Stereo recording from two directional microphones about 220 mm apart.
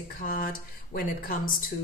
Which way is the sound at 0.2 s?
40° left (ahead or behind).